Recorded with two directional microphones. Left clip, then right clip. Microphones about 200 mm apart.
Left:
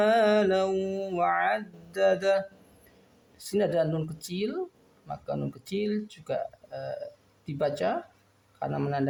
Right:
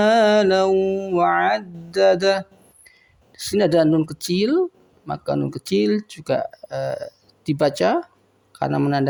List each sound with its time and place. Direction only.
0.0 s mantra: 45° right (ahead or behind)
0.7 s a sound: 25° right (ahead or behind)
1.2 s speech: 40° right (ahead or behind)
3.5 s speech: 45° right (ahead or behind)